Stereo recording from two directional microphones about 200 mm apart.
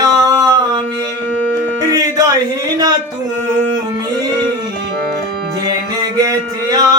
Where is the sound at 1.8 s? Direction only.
15° right (ahead or behind).